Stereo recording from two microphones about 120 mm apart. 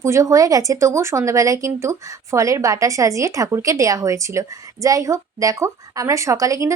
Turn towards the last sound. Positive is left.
turn(degrees=-25)  # may be behind; listen again after turning